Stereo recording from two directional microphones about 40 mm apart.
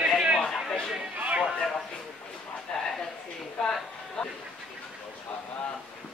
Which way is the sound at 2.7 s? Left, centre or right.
Centre.